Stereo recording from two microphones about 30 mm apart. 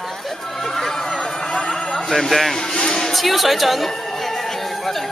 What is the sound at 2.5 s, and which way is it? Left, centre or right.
Speech, centre.